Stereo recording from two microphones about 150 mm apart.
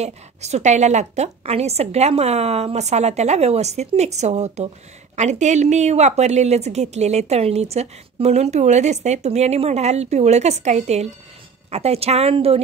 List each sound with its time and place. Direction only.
0.0 s a woman's voice: 50° right (ahead or behind)